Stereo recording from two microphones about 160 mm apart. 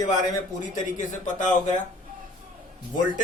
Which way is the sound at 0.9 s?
50° left (ahead or behind).